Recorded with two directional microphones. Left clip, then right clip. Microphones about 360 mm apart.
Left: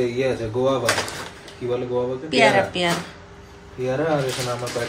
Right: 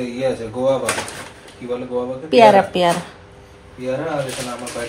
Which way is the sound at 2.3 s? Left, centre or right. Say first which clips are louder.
Right 7 dB; centre.